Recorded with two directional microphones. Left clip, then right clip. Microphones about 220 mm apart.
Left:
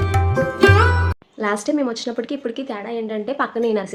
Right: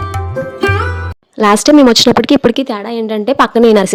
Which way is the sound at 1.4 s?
45° right (ahead or behind).